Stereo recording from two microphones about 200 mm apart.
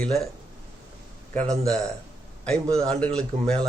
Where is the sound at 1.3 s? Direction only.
35° right (ahead or behind).